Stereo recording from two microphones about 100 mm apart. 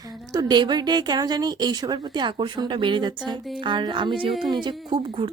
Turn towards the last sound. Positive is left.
turn(degrees=-60)  # may be behind; listen again after turning